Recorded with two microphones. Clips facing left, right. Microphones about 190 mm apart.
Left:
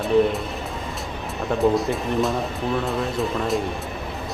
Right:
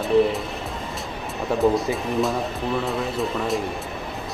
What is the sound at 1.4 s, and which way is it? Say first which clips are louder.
Speech: even; centre (ahead or behind).